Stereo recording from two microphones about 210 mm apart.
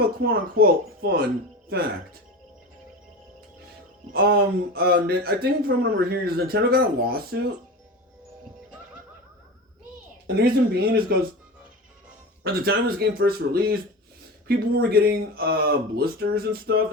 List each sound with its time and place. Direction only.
0.2 s speech: 45° right (ahead or behind)
4.1 s speech: 45° right (ahead or behind)
10.2 s speech: 50° right (ahead or behind)
12.4 s speech: 50° right (ahead or behind)